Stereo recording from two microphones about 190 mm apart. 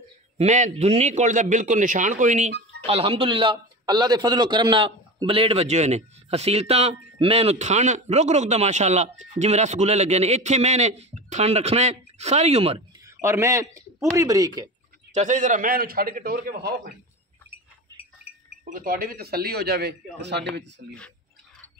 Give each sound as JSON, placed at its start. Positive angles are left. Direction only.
{"t": 0.4, "sound": "a man's voice", "side_deg": -35}
{"t": 13.0, "sound": "a man's voice", "side_deg": -15}
{"t": 15.1, "sound": "a man's voice", "side_deg": -40}
{"t": 18.7, "sound": "a man's voice", "side_deg": -45}